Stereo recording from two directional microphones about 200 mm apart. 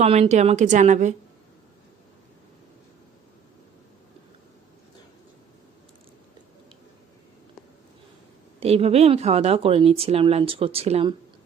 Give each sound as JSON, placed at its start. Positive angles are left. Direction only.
{"t": 0.0, "sound": "a woman's voice", "side_deg": -30}
{"t": 8.6, "sound": "speech", "side_deg": -30}